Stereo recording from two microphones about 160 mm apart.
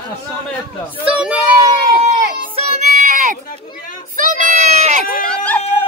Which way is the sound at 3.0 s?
55° right (ahead or behind).